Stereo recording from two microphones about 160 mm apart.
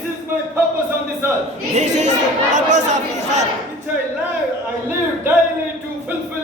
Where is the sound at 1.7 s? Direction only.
50° right (ahead or behind).